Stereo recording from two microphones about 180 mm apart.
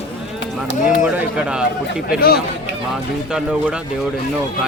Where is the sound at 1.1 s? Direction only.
5° right (ahead or behind).